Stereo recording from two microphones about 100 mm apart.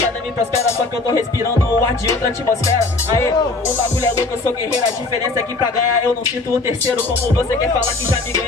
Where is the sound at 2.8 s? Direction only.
30° left (ahead or behind).